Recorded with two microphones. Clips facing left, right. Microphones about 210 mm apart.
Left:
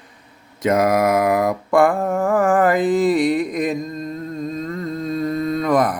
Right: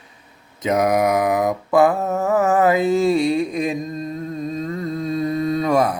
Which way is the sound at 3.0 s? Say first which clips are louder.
Even; 25° right (ahead or behind).